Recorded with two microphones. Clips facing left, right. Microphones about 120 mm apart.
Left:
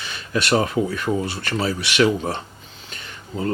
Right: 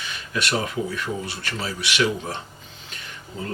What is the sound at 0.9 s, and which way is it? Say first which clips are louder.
Speech: left 6 dB; 45° left (ahead or behind).